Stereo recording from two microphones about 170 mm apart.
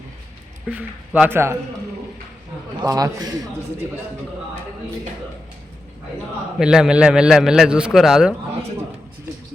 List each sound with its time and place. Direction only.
0.7 s speech: 5° right (ahead or behind)
2.8 s a man's voice: 20° right (ahead or behind)
6.6 s a man's voice: 5° right (ahead or behind)